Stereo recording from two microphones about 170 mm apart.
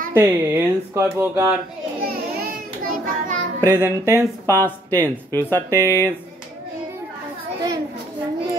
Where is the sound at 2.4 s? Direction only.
55° right (ahead or behind).